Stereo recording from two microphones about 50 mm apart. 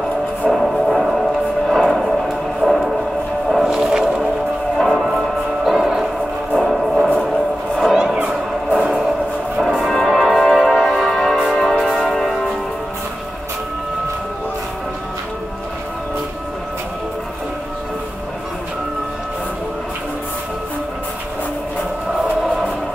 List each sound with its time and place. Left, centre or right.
0.5 s music: centre
7.2 s a sound: centre
7.9 s music: centre
8.2 s music: right
9.6 s music: centre